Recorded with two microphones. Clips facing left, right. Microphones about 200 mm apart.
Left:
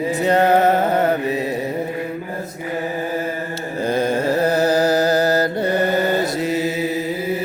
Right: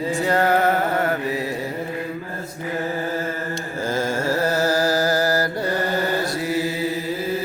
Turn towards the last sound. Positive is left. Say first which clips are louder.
# left 3 dB
turn(degrees=20)  # may be behind; listen again after turning